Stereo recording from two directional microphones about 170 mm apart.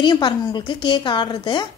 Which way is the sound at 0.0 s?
25° left (ahead or behind).